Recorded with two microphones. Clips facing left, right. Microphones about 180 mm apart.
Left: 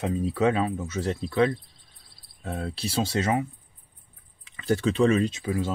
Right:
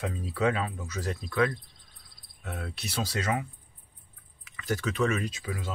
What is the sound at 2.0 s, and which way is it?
Cricket, 30° left (ahead or behind).